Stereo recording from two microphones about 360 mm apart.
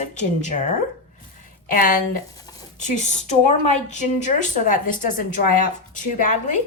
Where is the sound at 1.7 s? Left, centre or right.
Left.